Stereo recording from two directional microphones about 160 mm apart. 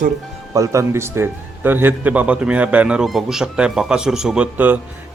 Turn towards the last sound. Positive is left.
turn(degrees=-10)  # may be behind; listen again after turning